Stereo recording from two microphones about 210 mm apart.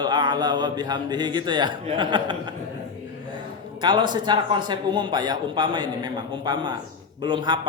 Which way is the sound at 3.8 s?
20° right (ahead or behind).